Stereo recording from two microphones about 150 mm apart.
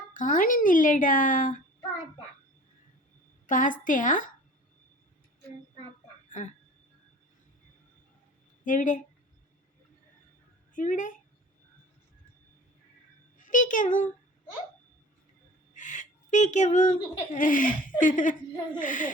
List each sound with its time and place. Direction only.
0.1 s speech: 60° left (ahead or behind)
3.4 s speech: 60° left (ahead or behind)
8.6 s speech: 60° left (ahead or behind)
10.8 s speech: 60° left (ahead or behind)
13.4 s a child's voice: 60° left (ahead or behind)
15.7 s speech: 55° left (ahead or behind)